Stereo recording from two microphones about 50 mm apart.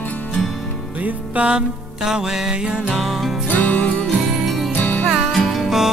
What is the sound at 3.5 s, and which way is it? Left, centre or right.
Music, left.